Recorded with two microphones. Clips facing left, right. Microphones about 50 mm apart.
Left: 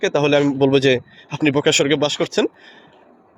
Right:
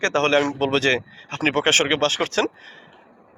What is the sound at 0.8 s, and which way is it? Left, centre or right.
Speech, right.